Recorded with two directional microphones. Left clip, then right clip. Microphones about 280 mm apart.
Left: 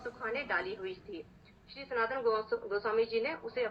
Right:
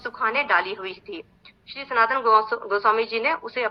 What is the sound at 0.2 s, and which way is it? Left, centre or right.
Speech, right.